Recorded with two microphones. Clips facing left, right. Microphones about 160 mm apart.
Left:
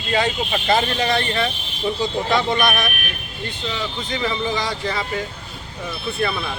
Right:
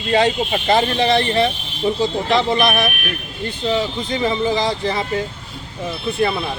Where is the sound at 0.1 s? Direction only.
30° right (ahead or behind).